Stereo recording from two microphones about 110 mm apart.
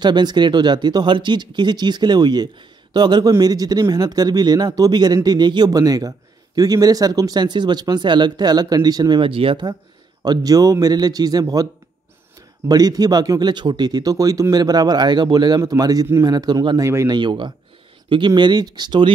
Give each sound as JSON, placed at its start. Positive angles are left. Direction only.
{"t": 0.0, "sound": "speech", "side_deg": -40}
{"t": 9.3, "sound": "speech", "side_deg": -55}
{"t": 10.2, "sound": "speech", "side_deg": -35}
{"t": 12.6, "sound": "speech", "side_deg": -35}
{"t": 17.1, "sound": "speech", "side_deg": -45}